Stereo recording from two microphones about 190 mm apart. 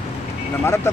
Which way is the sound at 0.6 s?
15° left (ahead or behind).